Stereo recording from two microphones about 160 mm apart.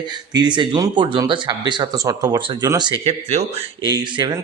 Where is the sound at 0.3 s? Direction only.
30° right (ahead or behind).